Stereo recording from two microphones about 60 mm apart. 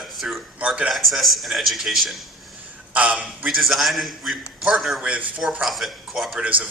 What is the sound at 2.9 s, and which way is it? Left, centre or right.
Speech, right.